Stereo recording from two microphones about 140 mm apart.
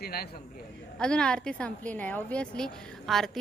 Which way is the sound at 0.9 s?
5° left (ahead or behind).